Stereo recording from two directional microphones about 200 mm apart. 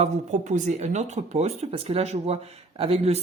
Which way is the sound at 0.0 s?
35° right (ahead or behind).